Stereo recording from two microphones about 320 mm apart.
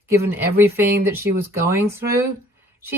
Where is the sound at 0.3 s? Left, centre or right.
Centre.